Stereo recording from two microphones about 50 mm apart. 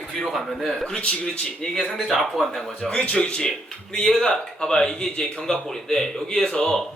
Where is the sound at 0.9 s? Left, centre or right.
Centre.